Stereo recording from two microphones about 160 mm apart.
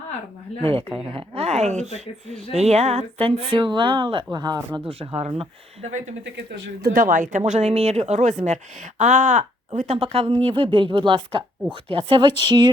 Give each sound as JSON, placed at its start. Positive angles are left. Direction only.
{"t": 0.6, "sound": "a woman's voice", "side_deg": -35}
{"t": 4.9, "sound": "a woman's voice", "side_deg": -40}
{"t": 6.8, "sound": "a woman's voice", "side_deg": -60}